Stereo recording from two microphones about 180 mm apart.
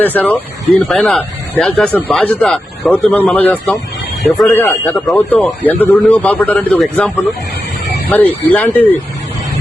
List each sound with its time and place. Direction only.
0.0 s a man's voice: 10° left (ahead or behind)
4.5 s a man's voice: 10° left (ahead or behind)